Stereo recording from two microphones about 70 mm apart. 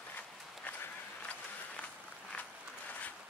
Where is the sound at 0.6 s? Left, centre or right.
Left.